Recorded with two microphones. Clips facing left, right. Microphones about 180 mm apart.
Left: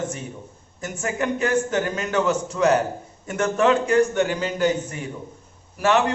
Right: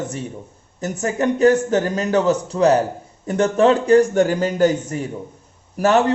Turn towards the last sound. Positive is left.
turn(degrees=-40)  # may be behind; listen again after turning